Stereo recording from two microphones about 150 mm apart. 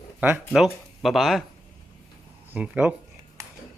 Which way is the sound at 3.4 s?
20° right (ahead or behind).